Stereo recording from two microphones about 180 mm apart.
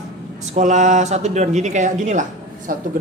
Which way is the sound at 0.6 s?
40° right (ahead or behind).